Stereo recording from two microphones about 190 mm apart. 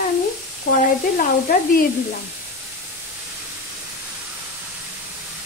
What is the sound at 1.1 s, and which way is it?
Sizzle, 45° left (ahead or behind).